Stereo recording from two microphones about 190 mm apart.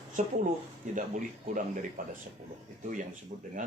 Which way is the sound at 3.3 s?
40° right (ahead or behind).